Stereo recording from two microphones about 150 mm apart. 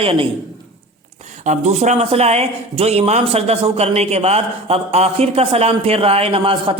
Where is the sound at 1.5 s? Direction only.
50° right (ahead or behind).